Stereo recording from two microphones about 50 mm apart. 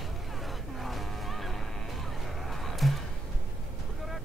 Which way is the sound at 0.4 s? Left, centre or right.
Centre.